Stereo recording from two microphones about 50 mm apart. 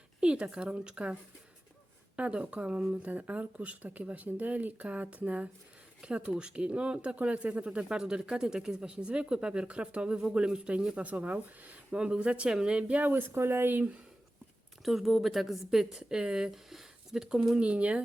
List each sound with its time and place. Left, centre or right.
0.2 s speech: centre
2.1 s speech: right
6.0 s speech: centre
11.9 s a woman's voice: right
12.9 s speech: right
13.3 s speech: right
14.8 s a woman's voice: centre
17.6 s speech: right